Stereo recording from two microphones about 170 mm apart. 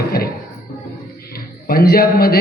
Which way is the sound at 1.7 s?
65° left (ahead or behind).